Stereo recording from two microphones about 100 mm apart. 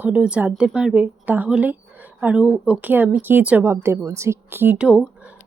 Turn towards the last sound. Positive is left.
turn(degrees=-10)  # may be behind; listen again after turning